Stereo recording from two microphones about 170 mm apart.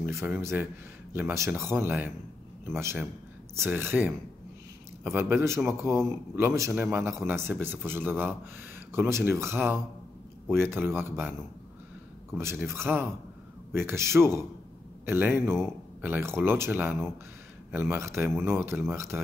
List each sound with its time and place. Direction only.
0.0 s a man's voice: 15° right (ahead or behind)
12.4 s a man's voice: 15° right (ahead or behind)